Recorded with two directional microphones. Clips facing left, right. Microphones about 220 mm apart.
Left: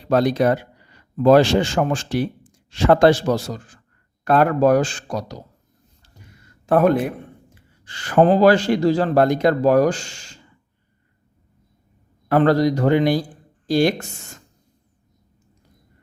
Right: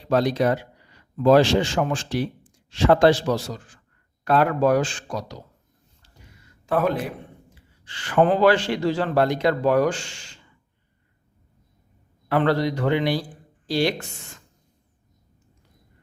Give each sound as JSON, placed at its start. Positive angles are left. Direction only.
{"t": 0.1, "sound": "speech", "side_deg": 50}
{"t": 6.7, "sound": "speech", "side_deg": 50}
{"t": 12.3, "sound": "speech", "side_deg": 40}